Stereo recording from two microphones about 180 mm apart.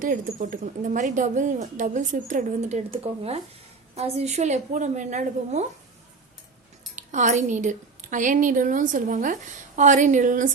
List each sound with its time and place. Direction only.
0.0 s a woman's voice: 50° right (ahead or behind)
6.9 s a woman's voice: 40° right (ahead or behind)